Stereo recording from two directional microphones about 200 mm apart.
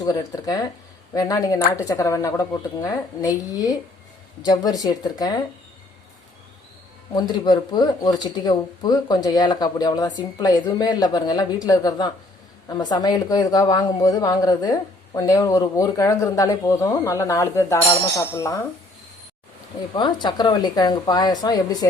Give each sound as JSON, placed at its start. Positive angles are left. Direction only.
{"t": 0.0, "sound": "speech", "side_deg": 20}
{"t": 7.1, "sound": "speech", "side_deg": 20}
{"t": 19.9, "sound": "speech", "side_deg": 20}